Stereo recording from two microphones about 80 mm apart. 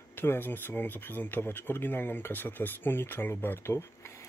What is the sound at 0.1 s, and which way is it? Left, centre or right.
Speech, left.